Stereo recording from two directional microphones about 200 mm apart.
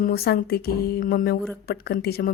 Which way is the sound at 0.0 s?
50° left (ahead or behind).